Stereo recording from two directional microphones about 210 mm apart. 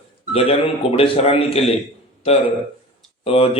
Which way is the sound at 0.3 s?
30° left (ahead or behind).